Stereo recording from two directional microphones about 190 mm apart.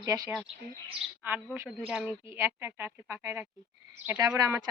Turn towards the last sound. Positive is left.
turn(degrees=-20)  # may be behind; listen again after turning